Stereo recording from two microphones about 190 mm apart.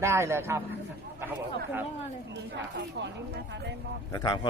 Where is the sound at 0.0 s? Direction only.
15° right (ahead or behind).